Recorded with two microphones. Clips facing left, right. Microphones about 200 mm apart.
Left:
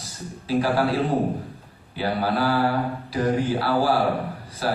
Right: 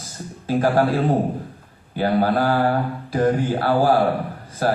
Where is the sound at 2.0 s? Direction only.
50° right (ahead or behind).